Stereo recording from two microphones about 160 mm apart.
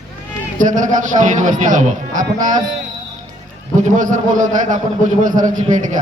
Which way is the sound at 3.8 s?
55° right (ahead or behind).